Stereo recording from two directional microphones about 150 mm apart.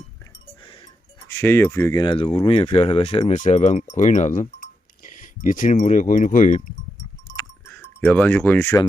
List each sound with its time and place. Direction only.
1.3 s speech: 15° left (ahead or behind)
2.0 s speech: 35° left (ahead or behind); by 6.7 s 55° left (ahead or behind)
7.7 s speech: 10° left (ahead or behind)